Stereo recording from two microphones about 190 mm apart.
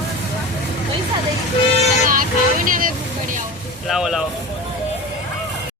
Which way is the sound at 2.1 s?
45° right (ahead or behind).